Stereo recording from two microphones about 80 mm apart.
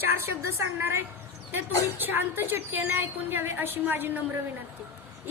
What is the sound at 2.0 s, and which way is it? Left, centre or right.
A woman's voice, right.